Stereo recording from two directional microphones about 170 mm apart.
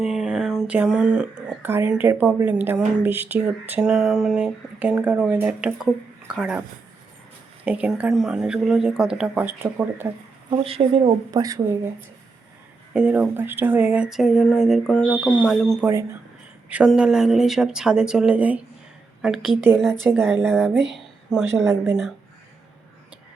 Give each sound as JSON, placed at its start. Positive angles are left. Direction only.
{"t": 0.0, "sound": "speech", "side_deg": -5}
{"t": 7.6, "sound": "speech", "side_deg": -5}
{"t": 10.5, "sound": "speech", "side_deg": -35}
{"t": 12.9, "sound": "speech", "side_deg": -5}